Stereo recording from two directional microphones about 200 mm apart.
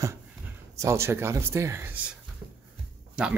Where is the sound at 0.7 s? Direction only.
15° right (ahead or behind).